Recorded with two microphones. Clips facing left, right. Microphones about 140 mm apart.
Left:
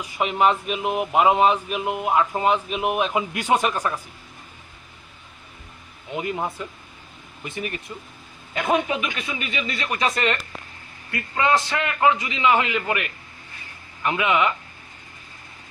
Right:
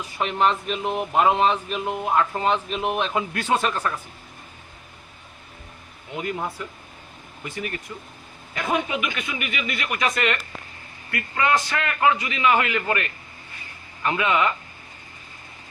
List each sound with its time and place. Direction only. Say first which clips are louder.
0.0 s speech: left 2 dB; 10° left (ahead or behind)
6.1 s a man's voice: left 2 dB; 20° left (ahead or behind)